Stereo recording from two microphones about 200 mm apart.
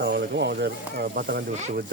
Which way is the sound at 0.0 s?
60° right (ahead or behind).